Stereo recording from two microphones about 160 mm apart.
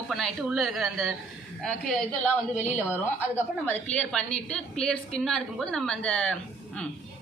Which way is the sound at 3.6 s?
10° left (ahead or behind).